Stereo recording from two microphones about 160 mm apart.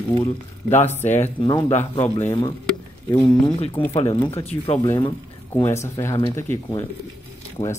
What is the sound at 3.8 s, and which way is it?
Speech, 35° left (ahead or behind).